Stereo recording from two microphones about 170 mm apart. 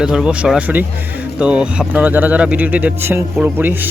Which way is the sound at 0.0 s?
5° right (ahead or behind).